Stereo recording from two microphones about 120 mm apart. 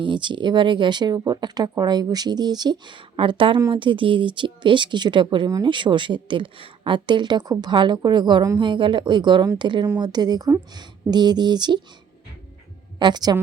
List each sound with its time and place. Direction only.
0.0 s speech: 40° right (ahead or behind)
13.0 s speech: 35° right (ahead or behind)